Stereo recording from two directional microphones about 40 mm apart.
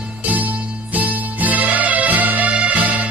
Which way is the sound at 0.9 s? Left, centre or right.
Right.